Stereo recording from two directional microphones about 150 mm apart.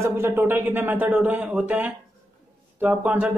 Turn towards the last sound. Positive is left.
turn(degrees=-10)  # may be behind; listen again after turning